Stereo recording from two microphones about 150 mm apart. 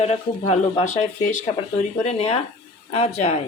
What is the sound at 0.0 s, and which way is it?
Speech, 45° left (ahead or behind).